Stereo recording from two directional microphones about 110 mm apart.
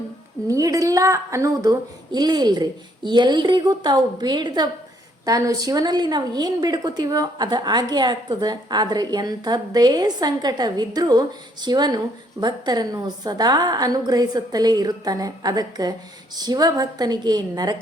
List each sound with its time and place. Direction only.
0.4 s a woman's voice: 30° right (ahead or behind)